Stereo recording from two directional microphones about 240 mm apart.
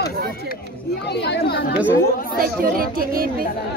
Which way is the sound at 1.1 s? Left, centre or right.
Left.